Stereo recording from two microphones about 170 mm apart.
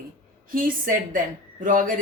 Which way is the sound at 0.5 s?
55° right (ahead or behind).